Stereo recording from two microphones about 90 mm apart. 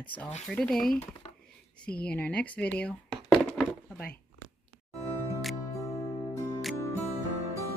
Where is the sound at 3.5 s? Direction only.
10° left (ahead or behind).